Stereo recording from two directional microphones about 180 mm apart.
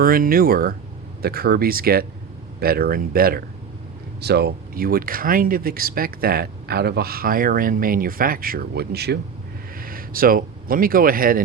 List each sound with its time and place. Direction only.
0.0 s speech: 55° right (ahead or behind)
9.8 s speech: 50° right (ahead or behind)